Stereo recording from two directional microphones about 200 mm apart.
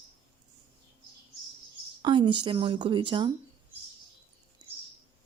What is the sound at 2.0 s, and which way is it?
Speech, 25° right (ahead or behind).